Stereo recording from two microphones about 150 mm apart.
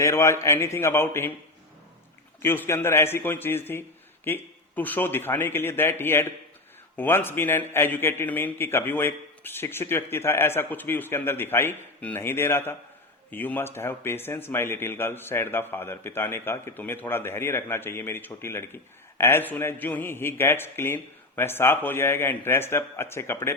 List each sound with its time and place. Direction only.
0.0 s a man's voice: 20° left (ahead or behind)
2.4 s speech: 15° left (ahead or behind)